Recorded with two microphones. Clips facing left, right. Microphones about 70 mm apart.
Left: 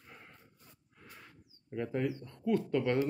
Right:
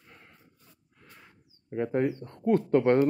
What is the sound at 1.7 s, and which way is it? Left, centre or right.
Speech, right.